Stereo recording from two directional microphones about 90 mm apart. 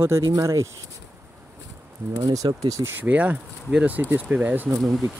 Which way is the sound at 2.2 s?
40° right (ahead or behind).